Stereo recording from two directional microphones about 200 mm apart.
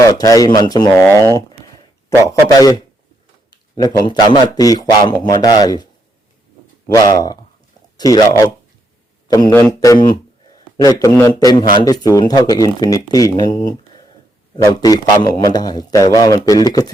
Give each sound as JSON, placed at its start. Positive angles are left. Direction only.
{"t": 0.0, "sound": "a man's voice", "side_deg": 20}
{"t": 1.5, "sound": "a sound", "side_deg": 15}
{"t": 3.5, "sound": "a man's voice", "side_deg": 20}
{"t": 9.2, "sound": "speech", "side_deg": 15}
{"t": 14.5, "sound": "a man's voice", "side_deg": 20}